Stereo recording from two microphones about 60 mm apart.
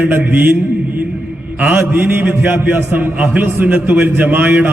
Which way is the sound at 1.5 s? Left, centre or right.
Right.